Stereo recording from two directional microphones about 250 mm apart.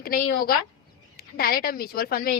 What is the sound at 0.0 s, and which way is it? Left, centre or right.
A woman's voice, left.